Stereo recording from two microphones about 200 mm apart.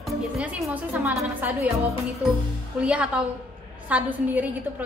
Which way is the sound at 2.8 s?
5° right (ahead or behind).